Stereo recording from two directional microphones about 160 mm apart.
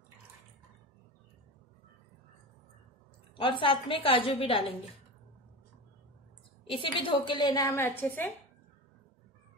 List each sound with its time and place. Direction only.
3.3 s a woman's voice: 35° left (ahead or behind)
6.7 s a woman's voice: 35° left (ahead or behind); by 8.3 s 15° left (ahead or behind)